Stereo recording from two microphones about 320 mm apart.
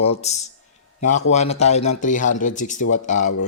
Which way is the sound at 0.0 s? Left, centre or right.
Centre.